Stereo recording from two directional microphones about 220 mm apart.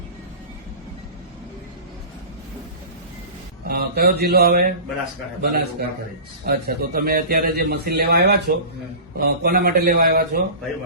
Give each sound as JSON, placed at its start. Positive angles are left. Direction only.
{"t": 3.7, "sound": "speech", "side_deg": -45}